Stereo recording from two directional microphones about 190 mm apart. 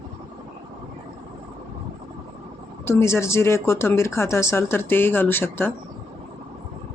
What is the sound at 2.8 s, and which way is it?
Speech, 15° left (ahead or behind).